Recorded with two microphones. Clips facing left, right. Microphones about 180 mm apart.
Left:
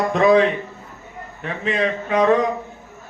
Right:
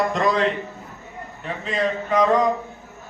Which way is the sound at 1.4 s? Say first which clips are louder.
Left 2 dB; 65° left (ahead or behind).